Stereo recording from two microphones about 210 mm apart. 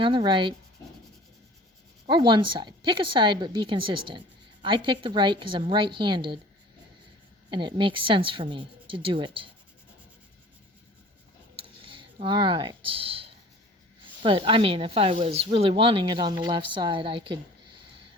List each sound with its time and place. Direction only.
0.0 s speech: 25° right (ahead or behind)
2.0 s speech: 20° right (ahead or behind)
7.5 s speech: 25° right (ahead or behind)
11.8 s a sound: 25° right (ahead or behind)
14.2 s speech: 25° right (ahead or behind)